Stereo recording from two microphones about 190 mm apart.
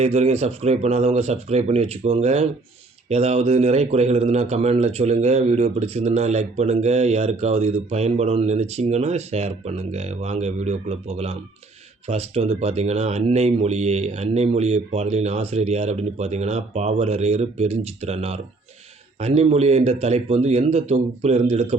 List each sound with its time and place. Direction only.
0.0 s a man's voice: 35° right (ahead or behind)